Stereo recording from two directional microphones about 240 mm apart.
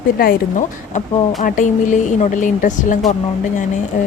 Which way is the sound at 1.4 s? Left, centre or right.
Left.